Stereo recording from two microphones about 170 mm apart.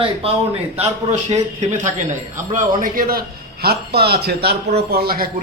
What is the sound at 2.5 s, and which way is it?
Speech, 55° right (ahead or behind).